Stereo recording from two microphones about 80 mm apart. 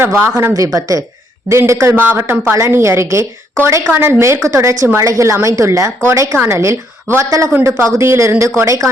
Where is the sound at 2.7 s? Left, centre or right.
Right.